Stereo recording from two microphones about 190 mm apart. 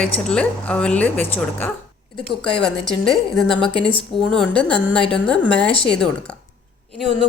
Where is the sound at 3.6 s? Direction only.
30° left (ahead or behind).